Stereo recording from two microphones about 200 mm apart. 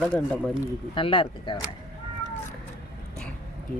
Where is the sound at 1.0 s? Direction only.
25° left (ahead or behind).